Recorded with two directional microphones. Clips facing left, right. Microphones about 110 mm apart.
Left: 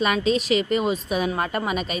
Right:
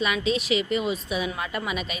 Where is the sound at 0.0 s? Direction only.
45° left (ahead or behind).